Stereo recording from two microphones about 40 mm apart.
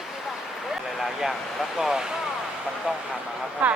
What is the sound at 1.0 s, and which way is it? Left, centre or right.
Speech, centre.